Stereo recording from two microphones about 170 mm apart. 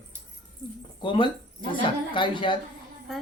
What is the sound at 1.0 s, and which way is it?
A woman's voice, 30° left (ahead or behind).